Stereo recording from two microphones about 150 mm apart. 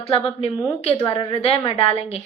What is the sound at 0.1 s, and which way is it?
A woman's voice, 40° left (ahead or behind).